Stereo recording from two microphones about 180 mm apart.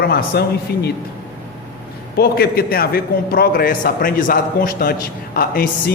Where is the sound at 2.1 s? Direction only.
60° left (ahead or behind).